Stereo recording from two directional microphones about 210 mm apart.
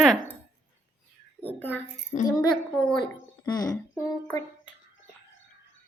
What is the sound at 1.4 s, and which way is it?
Speech, 10° left (ahead or behind).